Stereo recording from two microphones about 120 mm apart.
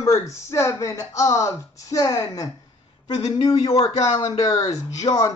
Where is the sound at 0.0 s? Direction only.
25° left (ahead or behind).